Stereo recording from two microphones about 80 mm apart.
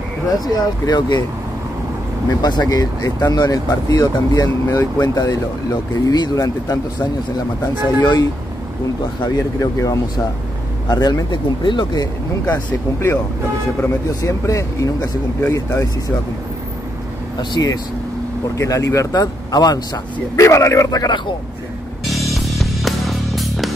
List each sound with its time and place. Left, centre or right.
0.5 s speech: left
2.4 s speech: left
9.2 s speech: left
11.6 s speech: left
12.4 s speech: left
14.2 s speech: left
17.6 s speech: left
19.1 s speech: left
20.3 s speech: left
22.1 s music: centre